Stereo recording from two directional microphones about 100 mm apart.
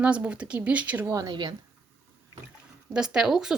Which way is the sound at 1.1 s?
35° right (ahead or behind).